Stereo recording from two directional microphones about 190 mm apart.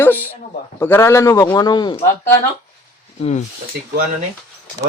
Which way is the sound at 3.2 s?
35° left (ahead or behind).